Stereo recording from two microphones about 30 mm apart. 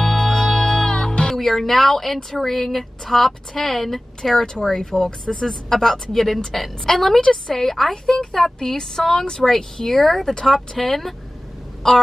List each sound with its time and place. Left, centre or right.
0.0 s music: left
0.5 s music: left
1.3 s a woman's voice: centre
7.2 s a woman's voice: centre
11.8 s speech: centre